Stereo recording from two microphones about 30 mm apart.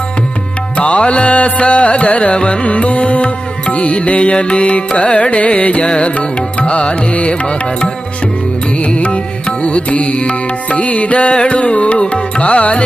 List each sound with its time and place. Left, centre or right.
0.8 s music: left
2.3 s carnatic music: left
2.6 s music: left
5.8 s carnatic music: left
6.1 s music: left
9.0 s music: left